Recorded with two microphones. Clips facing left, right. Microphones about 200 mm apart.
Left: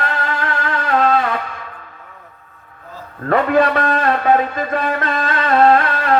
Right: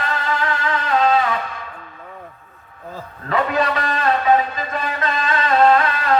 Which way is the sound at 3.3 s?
55° left (ahead or behind).